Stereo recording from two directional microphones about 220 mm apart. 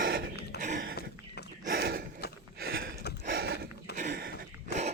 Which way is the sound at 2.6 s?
45° right (ahead or behind).